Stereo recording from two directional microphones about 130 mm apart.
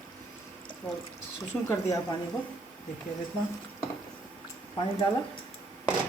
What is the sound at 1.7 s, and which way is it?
Speech, 25° left (ahead or behind).